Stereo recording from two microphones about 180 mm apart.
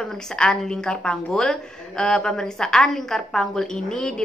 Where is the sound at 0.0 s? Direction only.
5° left (ahead or behind).